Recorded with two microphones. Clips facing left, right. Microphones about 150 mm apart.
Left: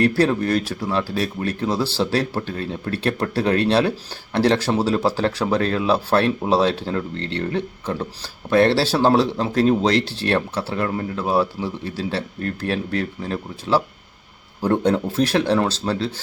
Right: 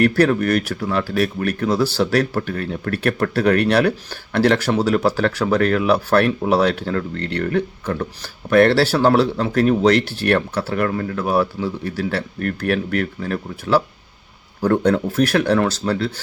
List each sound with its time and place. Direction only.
0.0 s speech: 25° left (ahead or behind)